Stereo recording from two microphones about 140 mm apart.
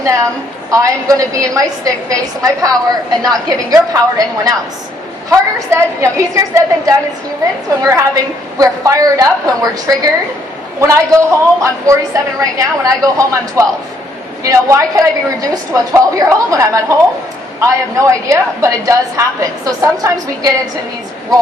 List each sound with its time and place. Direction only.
0.7 s a woman's voice: 25° right (ahead or behind)